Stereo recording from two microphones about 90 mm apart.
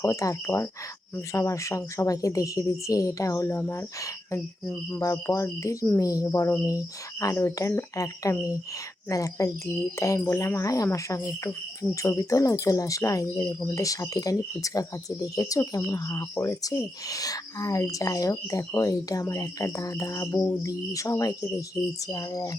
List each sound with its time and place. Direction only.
0.0 s speech: 35° left (ahead or behind)
4.4 s speech: 5° left (ahead or behind)
4.9 s speech: 40° left (ahead or behind)
7.3 s speech: 25° left (ahead or behind)